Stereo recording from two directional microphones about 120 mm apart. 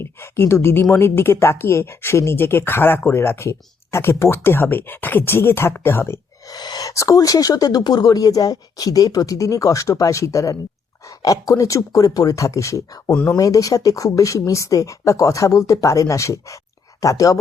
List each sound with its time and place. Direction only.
0.0 s a woman's voice: 20° left (ahead or behind)
6.5 s a woman's voice: 35° left (ahead or behind)